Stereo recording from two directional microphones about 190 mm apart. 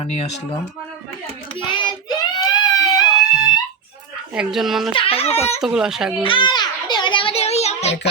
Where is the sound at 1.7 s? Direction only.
20° left (ahead or behind).